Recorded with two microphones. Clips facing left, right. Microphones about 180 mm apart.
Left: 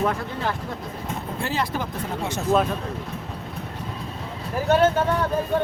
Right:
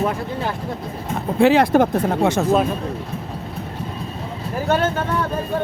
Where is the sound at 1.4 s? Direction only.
75° right (ahead or behind).